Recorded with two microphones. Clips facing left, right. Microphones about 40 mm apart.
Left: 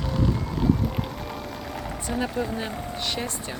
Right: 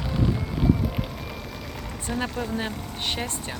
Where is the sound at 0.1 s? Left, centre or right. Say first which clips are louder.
Even; centre.